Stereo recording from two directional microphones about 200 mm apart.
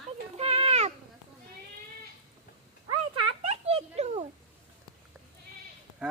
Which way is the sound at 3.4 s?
30° right (ahead or behind).